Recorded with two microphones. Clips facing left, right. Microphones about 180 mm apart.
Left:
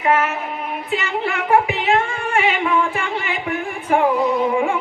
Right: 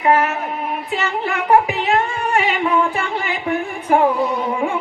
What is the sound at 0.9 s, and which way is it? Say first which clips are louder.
Child singing: left 1 dB; 40° right (ahead or behind).